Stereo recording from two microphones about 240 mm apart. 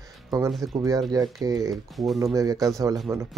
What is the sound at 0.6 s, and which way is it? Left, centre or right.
Speech, centre.